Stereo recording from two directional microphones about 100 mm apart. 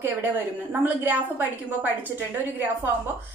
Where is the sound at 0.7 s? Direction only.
15° right (ahead or behind).